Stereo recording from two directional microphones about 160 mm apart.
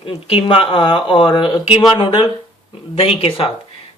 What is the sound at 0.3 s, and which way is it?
Speech, 35° left (ahead or behind).